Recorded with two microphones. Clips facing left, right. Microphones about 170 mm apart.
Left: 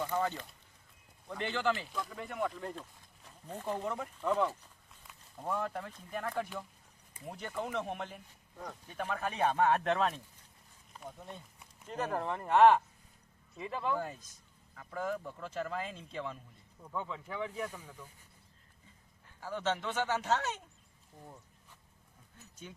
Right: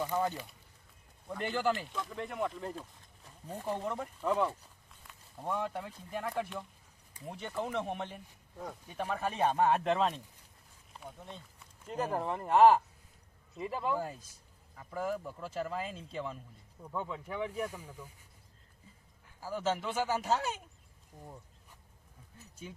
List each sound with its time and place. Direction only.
0.0 s speech: 15° right (ahead or behind)
3.2 s a sound: 10° right (ahead or behind)
3.8 s speech: centre (ahead or behind)
11.3 s a sound: 15° left (ahead or behind)
11.9 s speech: 10° right (ahead or behind)
19.4 s speech: 10° right (ahead or behind)